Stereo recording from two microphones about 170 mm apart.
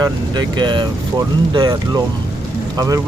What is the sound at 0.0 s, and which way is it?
Speech, 25° right (ahead or behind).